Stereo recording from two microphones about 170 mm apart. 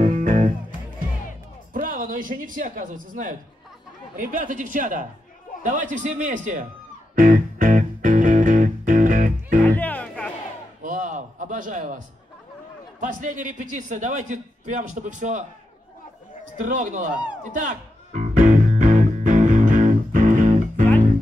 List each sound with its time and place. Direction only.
0.0 s music: 50° right (ahead or behind)
1.7 s a man's voice: 55° right (ahead or behind)
7.2 s music: 50° right (ahead or behind)
9.6 s music: 10° left (ahead or behind)
10.8 s a sound: 50° right (ahead or behind)
13.0 s a man's voice: 50° right (ahead or behind)
16.5 s music: 50° right (ahead or behind)